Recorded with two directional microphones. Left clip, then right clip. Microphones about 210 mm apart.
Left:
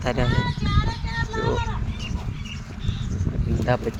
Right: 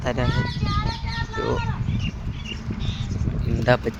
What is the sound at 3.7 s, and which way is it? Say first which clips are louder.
Speech: right 5 dB; 15° right (ahead or behind).